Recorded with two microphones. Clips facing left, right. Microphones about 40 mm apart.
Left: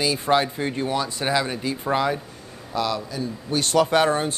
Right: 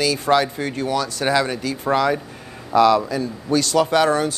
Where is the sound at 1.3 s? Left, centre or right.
Centre.